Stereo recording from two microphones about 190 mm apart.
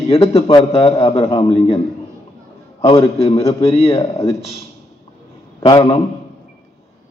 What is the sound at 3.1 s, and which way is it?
Speech, 30° left (ahead or behind).